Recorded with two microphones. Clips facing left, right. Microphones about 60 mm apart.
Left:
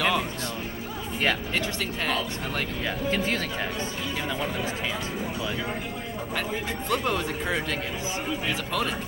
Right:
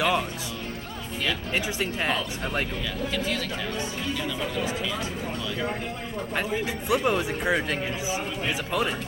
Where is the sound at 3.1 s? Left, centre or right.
Left.